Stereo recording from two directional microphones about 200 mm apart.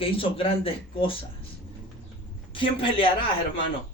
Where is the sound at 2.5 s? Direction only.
25° left (ahead or behind).